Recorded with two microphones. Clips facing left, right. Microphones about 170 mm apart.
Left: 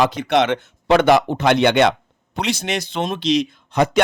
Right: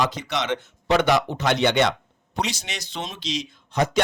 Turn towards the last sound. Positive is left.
turn(degrees=60)  # may be behind; listen again after turning